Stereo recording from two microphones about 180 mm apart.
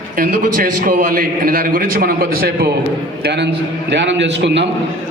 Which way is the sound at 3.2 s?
70° right (ahead or behind).